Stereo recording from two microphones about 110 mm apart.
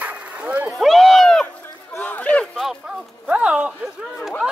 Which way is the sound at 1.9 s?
15° left (ahead or behind).